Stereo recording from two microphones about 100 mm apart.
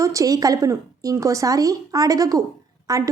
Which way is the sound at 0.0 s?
35° right (ahead or behind).